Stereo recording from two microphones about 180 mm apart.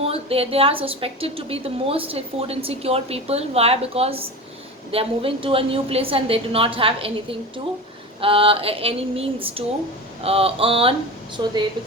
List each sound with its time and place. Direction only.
0.0 s a woman's voice: 35° right (ahead or behind)